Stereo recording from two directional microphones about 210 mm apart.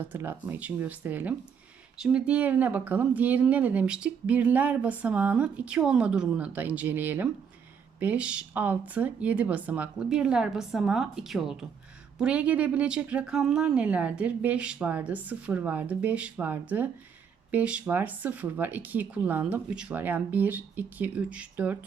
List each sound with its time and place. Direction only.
0.0 s speech: 10° right (ahead or behind)